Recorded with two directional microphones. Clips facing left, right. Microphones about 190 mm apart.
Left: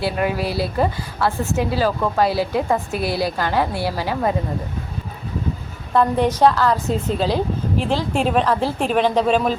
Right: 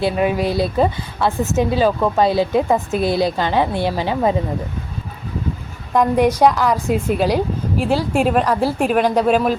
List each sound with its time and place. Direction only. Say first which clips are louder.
0.0 s a woman's voice: right 4 dB; 20° right (ahead or behind)
5.9 s a woman's voice: right 2 dB; 15° right (ahead or behind)